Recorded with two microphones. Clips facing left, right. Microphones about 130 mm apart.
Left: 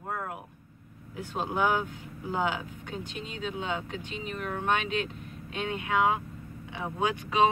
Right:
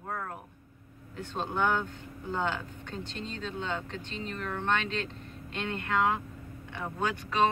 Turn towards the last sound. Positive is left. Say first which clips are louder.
# left 3 dB
turn(degrees=10)  # may be behind; listen again after turning